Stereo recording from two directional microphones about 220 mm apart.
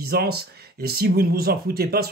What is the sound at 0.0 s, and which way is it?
Speech, 45° right (ahead or behind).